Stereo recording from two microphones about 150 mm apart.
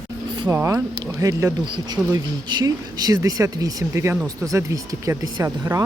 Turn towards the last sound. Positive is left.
turn(degrees=-20)  # may be behind; listen again after turning